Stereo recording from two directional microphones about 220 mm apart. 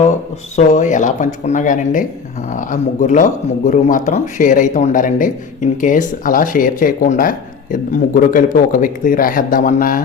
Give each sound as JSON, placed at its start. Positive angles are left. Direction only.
{"t": 0.5, "sound": "speech", "side_deg": 30}